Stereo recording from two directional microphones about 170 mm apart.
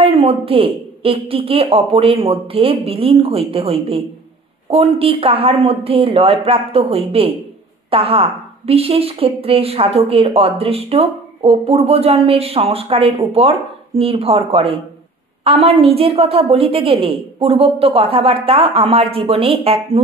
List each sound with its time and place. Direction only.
0.0 s a woman's voice: 35° right (ahead or behind)